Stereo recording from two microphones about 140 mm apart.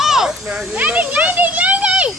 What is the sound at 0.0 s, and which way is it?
Children playing, 5° right (ahead or behind).